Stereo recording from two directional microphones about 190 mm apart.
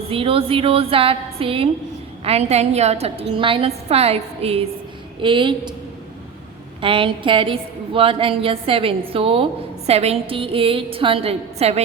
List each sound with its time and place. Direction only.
0.1 s a woman's voice: 30° right (ahead or behind)
6.8 s a woman's voice: 25° right (ahead or behind)